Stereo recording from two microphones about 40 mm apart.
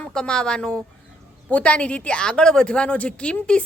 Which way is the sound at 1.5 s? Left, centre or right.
Left.